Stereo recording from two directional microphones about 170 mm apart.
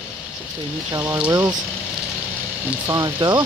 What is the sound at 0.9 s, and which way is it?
Speech, 15° right (ahead or behind).